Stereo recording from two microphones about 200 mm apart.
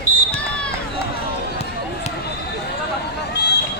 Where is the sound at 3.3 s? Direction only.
55° left (ahead or behind).